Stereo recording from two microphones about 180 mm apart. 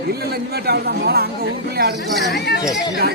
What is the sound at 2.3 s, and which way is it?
Speech, 65° left (ahead or behind).